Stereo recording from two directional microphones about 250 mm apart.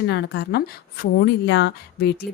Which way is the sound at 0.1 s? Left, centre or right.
Left.